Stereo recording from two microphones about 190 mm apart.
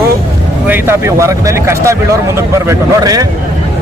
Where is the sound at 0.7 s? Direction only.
15° right (ahead or behind).